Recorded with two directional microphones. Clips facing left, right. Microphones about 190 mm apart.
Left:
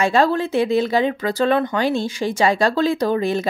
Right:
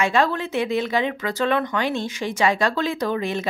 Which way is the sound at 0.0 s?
35° left (ahead or behind).